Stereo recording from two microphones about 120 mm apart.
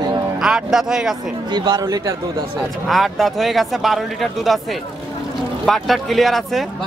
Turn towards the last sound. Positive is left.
turn(degrees=0)  # may be behind; listen again after turning